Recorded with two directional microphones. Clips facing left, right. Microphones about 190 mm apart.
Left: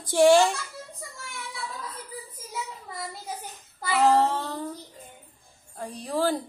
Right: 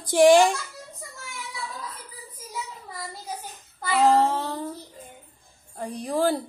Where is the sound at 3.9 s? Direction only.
15° right (ahead or behind).